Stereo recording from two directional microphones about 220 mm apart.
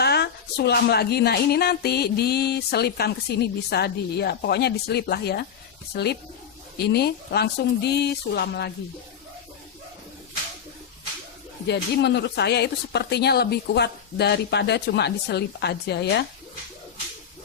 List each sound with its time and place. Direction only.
0.0 s speech: 45° left (ahead or behind)
11.7 s speech: 50° left (ahead or behind)